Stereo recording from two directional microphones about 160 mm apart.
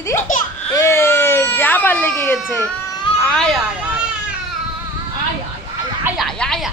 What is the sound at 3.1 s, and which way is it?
Speech, 5° left (ahead or behind).